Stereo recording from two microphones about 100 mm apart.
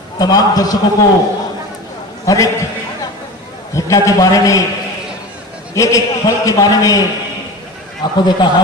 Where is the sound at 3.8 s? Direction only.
35° left (ahead or behind).